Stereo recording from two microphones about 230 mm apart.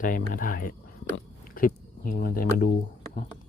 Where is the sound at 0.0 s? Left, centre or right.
Left.